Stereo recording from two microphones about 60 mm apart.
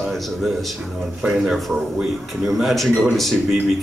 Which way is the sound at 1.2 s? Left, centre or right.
Centre.